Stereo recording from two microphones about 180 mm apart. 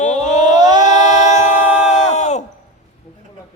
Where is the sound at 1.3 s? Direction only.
40° left (ahead or behind).